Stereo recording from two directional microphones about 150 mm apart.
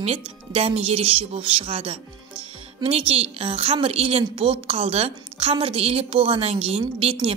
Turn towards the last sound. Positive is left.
turn(degrees=-40)  # may be behind; listen again after turning